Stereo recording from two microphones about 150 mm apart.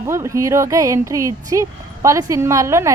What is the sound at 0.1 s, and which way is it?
A woman's voice, 20° right (ahead or behind).